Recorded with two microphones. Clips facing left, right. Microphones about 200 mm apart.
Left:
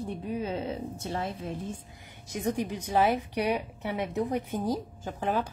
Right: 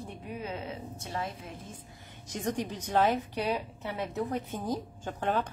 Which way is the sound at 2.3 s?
10° left (ahead or behind).